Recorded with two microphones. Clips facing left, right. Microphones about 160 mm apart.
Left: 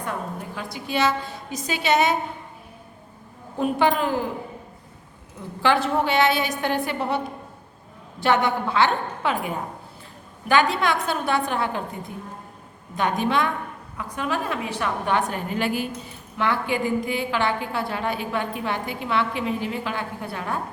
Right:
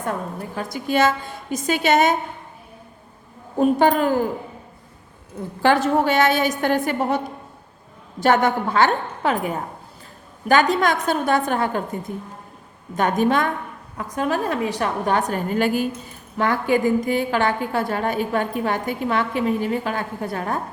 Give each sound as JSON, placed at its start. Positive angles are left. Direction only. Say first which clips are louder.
{"t": 0.0, "sound": "a woman's voice", "louder": "right 3 dB", "side_deg": -45}
{"t": 3.6, "sound": "a woman's voice", "louder": "right 4 dB", "side_deg": -45}
{"t": 5.6, "sound": "a woman's voice", "louder": "right 4 dB", "side_deg": -45}
{"t": 8.2, "sound": "a woman's voice", "louder": "right 3 dB", "side_deg": -45}
{"t": 10.5, "sound": "a woman's voice", "louder": "right 3 dB", "side_deg": -40}
{"t": 13.0, "sound": "a woman's voice", "louder": "right 4 dB", "side_deg": -45}